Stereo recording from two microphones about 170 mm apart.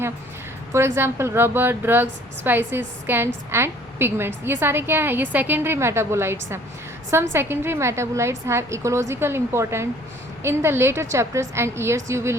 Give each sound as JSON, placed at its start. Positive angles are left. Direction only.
{"t": 0.7, "sound": "a woman's voice", "side_deg": -15}